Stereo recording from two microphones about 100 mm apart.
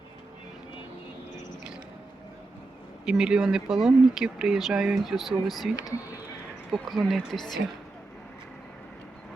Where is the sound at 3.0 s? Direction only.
5° right (ahead or behind).